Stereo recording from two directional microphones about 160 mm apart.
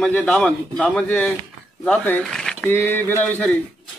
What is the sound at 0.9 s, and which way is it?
Speech, 10° left (ahead or behind).